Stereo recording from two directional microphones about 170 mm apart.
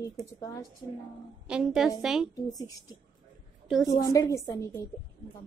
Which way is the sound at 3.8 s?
20° left (ahead or behind).